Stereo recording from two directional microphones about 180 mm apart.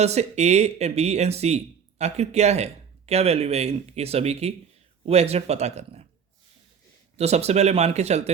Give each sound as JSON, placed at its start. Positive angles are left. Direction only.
{"t": 0.0, "sound": "speech", "side_deg": -35}
{"t": 7.2, "sound": "speech", "side_deg": -35}